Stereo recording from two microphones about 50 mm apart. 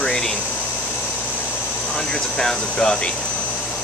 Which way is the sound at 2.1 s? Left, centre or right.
Centre.